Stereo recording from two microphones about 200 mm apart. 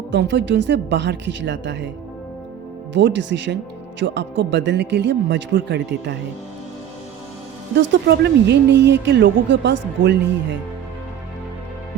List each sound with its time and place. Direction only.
0.1 s a woman's voice: 60° right (ahead or behind)
2.9 s a woman's voice: 65° right (ahead or behind)
7.8 s a woman's voice: 60° right (ahead or behind)